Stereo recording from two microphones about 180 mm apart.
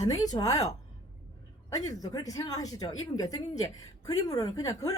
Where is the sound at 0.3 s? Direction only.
20° left (ahead or behind).